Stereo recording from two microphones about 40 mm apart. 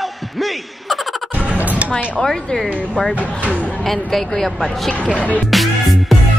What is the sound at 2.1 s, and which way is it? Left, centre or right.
Speech, centre.